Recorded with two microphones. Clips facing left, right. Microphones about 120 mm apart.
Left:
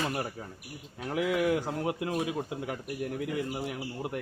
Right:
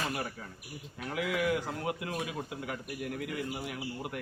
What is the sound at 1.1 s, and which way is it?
A man's voice, 30° left (ahead or behind).